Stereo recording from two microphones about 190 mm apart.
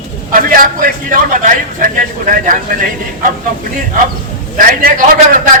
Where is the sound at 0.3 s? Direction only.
45° right (ahead or behind).